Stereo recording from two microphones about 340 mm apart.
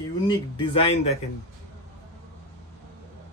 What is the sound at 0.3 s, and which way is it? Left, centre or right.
Speech, centre.